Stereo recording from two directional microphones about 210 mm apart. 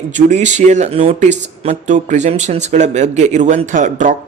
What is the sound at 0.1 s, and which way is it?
Speech, 35° right (ahead or behind).